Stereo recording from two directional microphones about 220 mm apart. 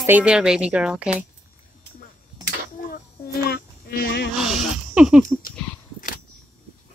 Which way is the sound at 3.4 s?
45° left (ahead or behind).